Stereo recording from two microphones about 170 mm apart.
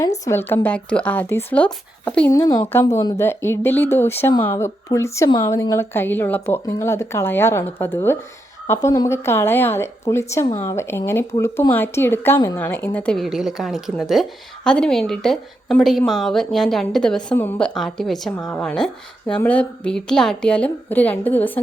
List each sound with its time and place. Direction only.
0.3 s a woman's voice: 15° left (ahead or behind)
2.5 s a woman's voice: 20° left (ahead or behind)